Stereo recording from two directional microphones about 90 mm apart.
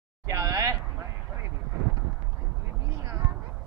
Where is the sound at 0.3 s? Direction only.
30° right (ahead or behind).